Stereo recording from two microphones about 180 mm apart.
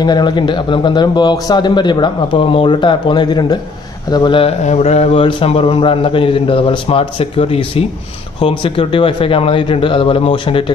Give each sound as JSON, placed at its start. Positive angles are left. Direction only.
{"t": 0.0, "sound": "speech", "side_deg": 25}